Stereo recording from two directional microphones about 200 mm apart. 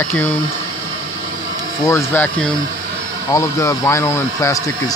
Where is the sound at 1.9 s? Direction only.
10° left (ahead or behind).